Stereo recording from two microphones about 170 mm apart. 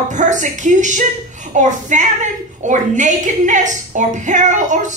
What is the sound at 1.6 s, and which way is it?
A woman's voice, 45° right (ahead or behind).